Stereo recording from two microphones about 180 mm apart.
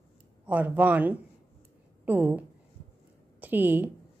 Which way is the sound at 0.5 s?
10° right (ahead or behind).